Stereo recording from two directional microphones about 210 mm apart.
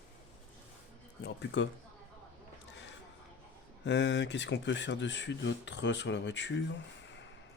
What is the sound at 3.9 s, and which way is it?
Speech, 60° left (ahead or behind).